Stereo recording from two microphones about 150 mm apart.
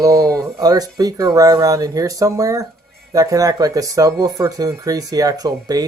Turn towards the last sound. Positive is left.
turn(degrees=-25)  # may be behind; listen again after turning